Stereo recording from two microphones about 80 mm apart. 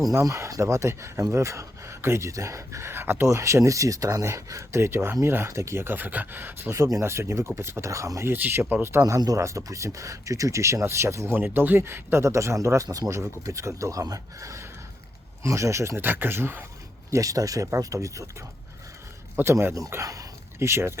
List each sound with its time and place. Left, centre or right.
0.1 s speech: right
3.2 s speech: right
8.3 s speech: right
9.0 s speech: right
11.3 s speech: right
17.1 s speech: right
19.4 s speech: right